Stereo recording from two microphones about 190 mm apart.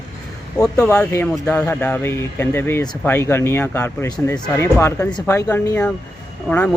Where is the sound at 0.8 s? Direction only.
10° left (ahead or behind).